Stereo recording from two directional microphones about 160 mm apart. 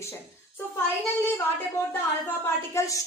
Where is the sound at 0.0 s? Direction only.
15° left (ahead or behind).